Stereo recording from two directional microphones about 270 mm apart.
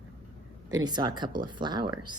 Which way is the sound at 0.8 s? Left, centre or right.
Centre.